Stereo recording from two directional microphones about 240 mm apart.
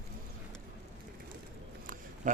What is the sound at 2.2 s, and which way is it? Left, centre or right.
Speech, right.